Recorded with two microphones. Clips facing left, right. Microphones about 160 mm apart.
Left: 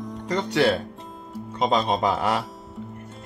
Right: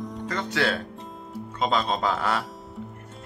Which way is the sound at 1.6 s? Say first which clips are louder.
Left 3 dB; 25° left (ahead or behind).